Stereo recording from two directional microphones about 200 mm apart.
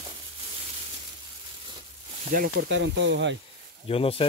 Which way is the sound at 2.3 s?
45° right (ahead or behind).